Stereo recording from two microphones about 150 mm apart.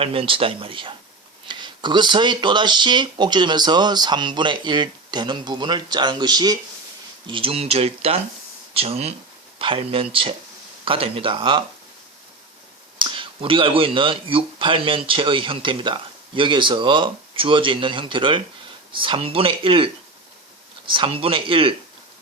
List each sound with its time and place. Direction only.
0.0 s speech: 40° right (ahead or behind)
13.0 s speech: 35° right (ahead or behind)
20.9 s speech: 35° right (ahead or behind)